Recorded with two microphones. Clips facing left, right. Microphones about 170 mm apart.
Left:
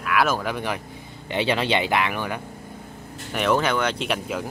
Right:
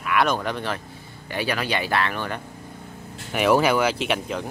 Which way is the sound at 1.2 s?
20° left (ahead or behind).